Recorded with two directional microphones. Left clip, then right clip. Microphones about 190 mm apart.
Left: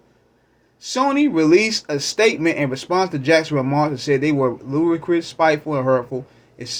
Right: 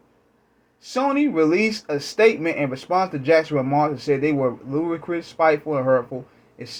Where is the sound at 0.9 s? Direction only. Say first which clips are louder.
Left 3 dB; 15° right (ahead or behind).